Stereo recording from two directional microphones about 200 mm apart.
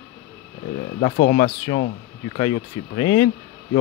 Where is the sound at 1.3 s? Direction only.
30° left (ahead or behind).